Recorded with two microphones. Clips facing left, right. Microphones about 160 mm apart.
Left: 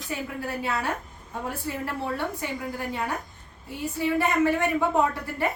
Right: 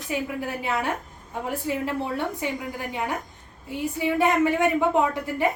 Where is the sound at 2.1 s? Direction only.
15° right (ahead or behind).